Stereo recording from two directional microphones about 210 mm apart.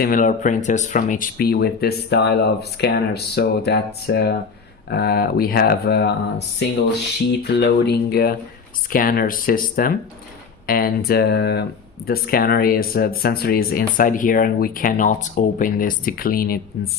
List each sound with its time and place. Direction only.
0.0 s speech: 40° left (ahead or behind)
7.4 s speech: 50° left (ahead or behind)